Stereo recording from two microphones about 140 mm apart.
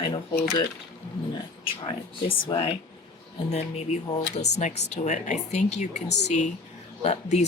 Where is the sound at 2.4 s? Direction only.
40° left (ahead or behind).